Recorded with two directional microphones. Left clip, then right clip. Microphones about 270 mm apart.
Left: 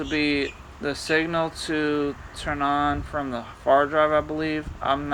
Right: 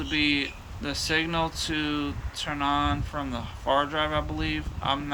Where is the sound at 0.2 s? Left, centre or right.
Right.